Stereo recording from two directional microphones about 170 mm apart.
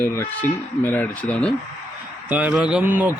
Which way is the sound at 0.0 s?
10° left (ahead or behind).